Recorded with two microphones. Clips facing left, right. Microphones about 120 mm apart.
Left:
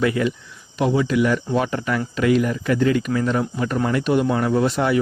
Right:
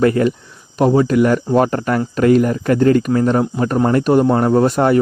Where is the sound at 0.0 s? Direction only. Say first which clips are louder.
Right 6 dB; 45° right (ahead or behind).